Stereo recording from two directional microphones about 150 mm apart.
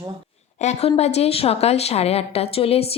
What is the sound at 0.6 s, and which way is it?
A woman's voice, 50° left (ahead or behind).